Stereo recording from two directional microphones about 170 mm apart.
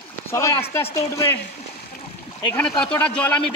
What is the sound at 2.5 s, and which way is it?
Speech, 5° left (ahead or behind).